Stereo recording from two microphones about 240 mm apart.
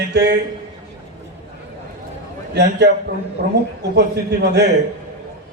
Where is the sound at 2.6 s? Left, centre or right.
Right.